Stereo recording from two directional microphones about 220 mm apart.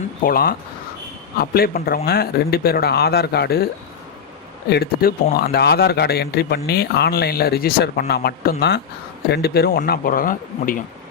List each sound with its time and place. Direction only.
0.2 s a man's voice: 40° left (ahead or behind)
4.7 s a man's voice: 45° left (ahead or behind)